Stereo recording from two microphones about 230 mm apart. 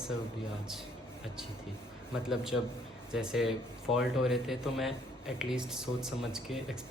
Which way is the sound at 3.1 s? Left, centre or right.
Centre.